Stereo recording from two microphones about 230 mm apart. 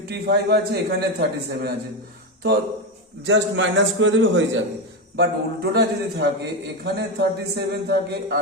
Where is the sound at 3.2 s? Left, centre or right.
Right.